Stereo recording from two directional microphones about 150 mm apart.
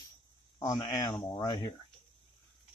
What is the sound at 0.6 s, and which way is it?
Speech, 25° left (ahead or behind).